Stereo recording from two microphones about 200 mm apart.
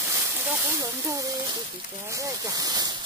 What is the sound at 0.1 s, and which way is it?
Speech, 15° right (ahead or behind).